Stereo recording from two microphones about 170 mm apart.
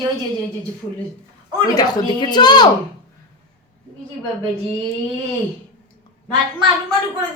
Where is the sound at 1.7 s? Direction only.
25° left (ahead or behind).